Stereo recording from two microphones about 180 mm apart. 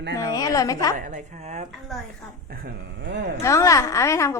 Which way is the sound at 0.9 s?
45° right (ahead or behind).